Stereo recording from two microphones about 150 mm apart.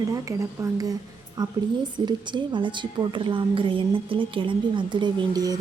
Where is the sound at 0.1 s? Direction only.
20° right (ahead or behind).